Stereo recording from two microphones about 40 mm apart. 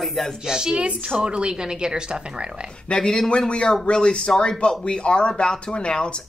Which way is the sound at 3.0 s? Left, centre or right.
Centre.